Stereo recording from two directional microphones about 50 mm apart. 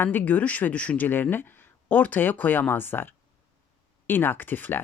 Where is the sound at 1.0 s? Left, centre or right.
Left.